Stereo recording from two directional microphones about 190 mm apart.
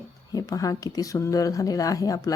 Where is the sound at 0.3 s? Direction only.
20° left (ahead or behind).